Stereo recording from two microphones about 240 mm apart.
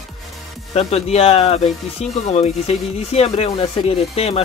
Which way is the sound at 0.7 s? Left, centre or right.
Left.